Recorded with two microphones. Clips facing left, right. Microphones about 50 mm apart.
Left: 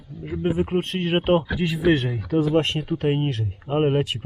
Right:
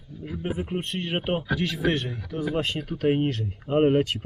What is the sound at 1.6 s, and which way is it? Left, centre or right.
Speech, centre.